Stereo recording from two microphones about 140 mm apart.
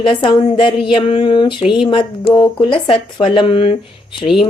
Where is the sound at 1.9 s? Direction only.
35° left (ahead or behind).